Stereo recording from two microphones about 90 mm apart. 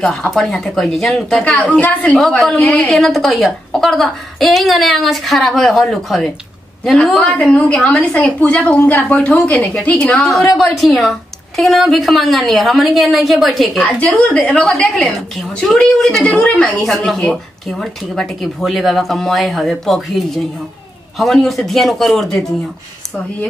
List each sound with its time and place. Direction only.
0.0 s a woman's voice: 5° left (ahead or behind)
2.1 s speech: 5° left (ahead or behind)
2.5 s a woman's voice: 15° left (ahead or behind)
2.9 s speech: centre (ahead or behind)
7.2 s a woman's voice: 15° left (ahead or behind)
10.3 s speech: centre (ahead or behind)
13.8 s a woman's voice: 15° left (ahead or behind)
16.8 s speech: centre (ahead or behind)